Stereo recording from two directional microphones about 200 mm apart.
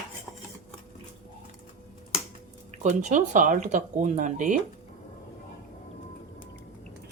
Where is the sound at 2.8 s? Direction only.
35° right (ahead or behind).